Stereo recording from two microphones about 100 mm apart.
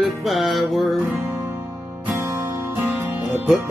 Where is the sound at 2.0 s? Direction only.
20° right (ahead or behind).